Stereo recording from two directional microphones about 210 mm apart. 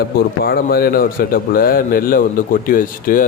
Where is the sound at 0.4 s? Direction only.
45° left (ahead or behind).